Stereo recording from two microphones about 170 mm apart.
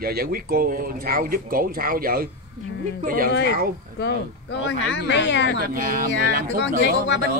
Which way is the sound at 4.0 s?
90° left.